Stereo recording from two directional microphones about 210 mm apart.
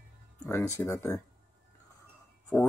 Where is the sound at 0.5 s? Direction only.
15° left (ahead or behind).